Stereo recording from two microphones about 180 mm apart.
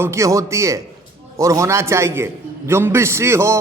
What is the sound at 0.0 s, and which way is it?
A man's voice, 15° right (ahead or behind).